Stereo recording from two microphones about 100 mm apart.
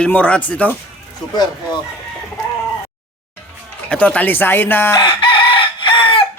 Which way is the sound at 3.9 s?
15° left (ahead or behind).